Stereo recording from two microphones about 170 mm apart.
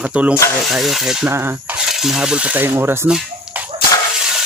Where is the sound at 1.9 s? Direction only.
Centre (ahead or behind).